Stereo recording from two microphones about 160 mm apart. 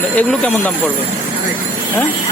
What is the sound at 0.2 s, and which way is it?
Speech, 5° left (ahead or behind).